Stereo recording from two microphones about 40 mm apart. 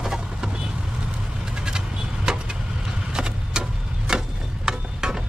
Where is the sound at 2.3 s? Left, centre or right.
Centre.